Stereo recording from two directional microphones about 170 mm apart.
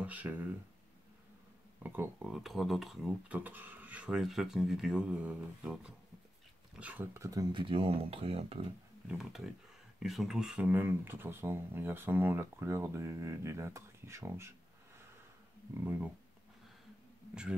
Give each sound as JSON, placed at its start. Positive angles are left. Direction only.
{"t": 0.0, "sound": "speech", "side_deg": -10}
{"t": 1.8, "sound": "speech", "side_deg": -10}
{"t": 9.1, "sound": "speech", "side_deg": 0}
{"t": 15.7, "sound": "speech", "side_deg": -10}
{"t": 17.3, "sound": "speech", "side_deg": -5}